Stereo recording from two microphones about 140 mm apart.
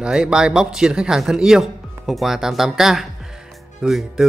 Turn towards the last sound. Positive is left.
turn(degrees=0)  # may be behind; listen again after turning